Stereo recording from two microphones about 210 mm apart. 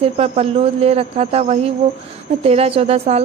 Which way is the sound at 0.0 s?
30° right (ahead or behind).